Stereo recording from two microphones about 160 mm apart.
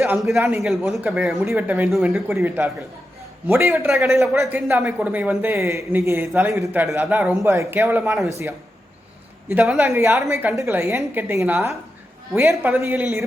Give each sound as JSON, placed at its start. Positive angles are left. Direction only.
{"t": 0.2, "sound": "a man's voice", "side_deg": 0}
{"t": 2.2, "sound": "a woman's voice", "side_deg": -15}
{"t": 8.3, "sound": "a woman's voice", "side_deg": -20}